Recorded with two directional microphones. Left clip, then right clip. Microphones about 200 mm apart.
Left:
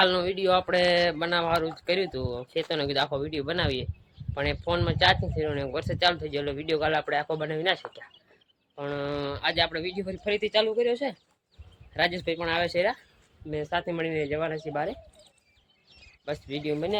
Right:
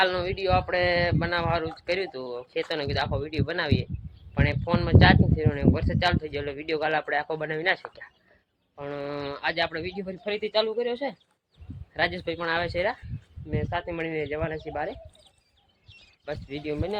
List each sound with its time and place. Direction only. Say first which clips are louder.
0.0 s speech: left 1 dB; 15° left (ahead or behind)
16.2 s speech: left 2 dB; 10° left (ahead or behind)